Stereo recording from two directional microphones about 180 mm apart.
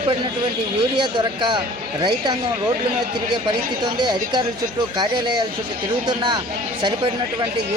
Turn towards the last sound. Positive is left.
turn(degrees=-25)  # may be behind; listen again after turning